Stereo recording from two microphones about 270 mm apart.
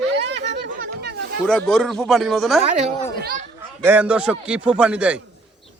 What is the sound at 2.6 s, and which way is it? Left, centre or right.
Speech, right.